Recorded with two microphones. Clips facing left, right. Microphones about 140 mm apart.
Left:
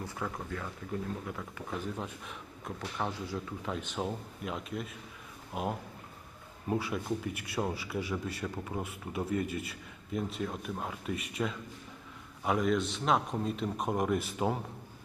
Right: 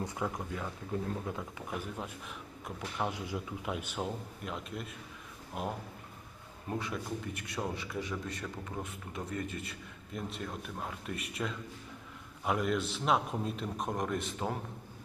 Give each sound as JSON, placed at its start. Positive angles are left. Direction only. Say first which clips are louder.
{"t": 0.0, "sound": "speech", "louder": "right 2 dB", "side_deg": -20}
{"t": 2.0, "sound": "a man's voice", "louder": "left 1 dB", "side_deg": -5}